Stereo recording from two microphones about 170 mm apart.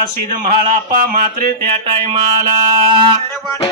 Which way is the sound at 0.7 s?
55° right (ahead or behind).